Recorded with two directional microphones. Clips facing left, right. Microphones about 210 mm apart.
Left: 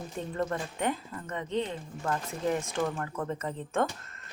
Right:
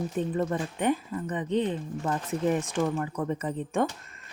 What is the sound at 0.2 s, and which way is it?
Speech, 15° right (ahead or behind).